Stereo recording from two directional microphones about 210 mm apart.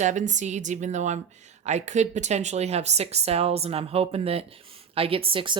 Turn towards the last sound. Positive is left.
turn(degrees=-25)  # may be behind; listen again after turning